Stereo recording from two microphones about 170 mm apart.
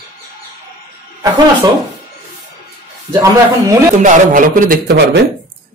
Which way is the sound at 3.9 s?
50° right (ahead or behind).